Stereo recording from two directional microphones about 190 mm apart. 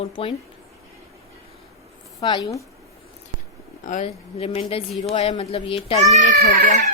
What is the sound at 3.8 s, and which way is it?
A woman's voice, 35° left (ahead or behind).